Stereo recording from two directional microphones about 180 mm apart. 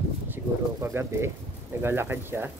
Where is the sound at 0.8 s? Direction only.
15° right (ahead or behind).